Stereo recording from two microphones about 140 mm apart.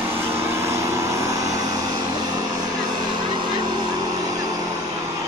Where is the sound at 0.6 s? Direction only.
20° right (ahead or behind).